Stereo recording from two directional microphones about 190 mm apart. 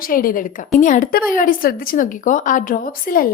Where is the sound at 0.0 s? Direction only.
50° left (ahead or behind).